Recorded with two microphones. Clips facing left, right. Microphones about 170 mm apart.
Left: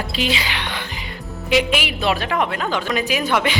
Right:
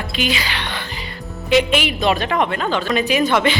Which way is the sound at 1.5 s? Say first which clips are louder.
Right 3 dB; 5° left (ahead or behind).